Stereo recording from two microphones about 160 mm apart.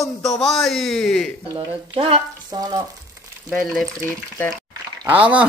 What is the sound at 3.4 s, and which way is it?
Speech, centre (ahead or behind).